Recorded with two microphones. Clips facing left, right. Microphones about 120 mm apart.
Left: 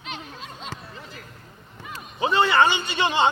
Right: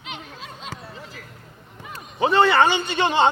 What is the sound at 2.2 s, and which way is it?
A man's voice, 60° right (ahead or behind).